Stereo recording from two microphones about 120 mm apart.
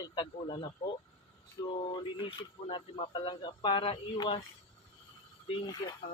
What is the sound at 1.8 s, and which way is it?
Speech, 45° left (ahead or behind).